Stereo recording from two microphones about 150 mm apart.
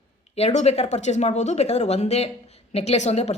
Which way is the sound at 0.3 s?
45° left (ahead or behind).